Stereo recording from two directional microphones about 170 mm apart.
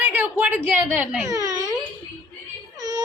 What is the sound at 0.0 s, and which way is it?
A woman's voice, 10° right (ahead or behind).